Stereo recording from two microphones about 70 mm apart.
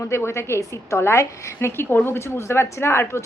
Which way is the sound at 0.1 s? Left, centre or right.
Left.